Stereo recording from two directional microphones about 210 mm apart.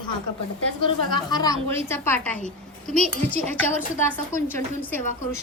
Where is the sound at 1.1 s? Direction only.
20° left (ahead or behind); by 3.0 s 5° left (ahead or behind).